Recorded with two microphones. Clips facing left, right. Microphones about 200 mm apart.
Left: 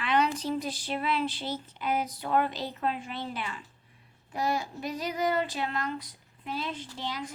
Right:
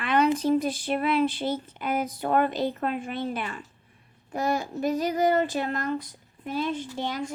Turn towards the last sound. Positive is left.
turn(degrees=-50)  # may be behind; listen again after turning